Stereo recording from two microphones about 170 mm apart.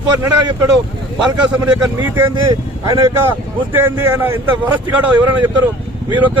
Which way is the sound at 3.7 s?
15° right (ahead or behind).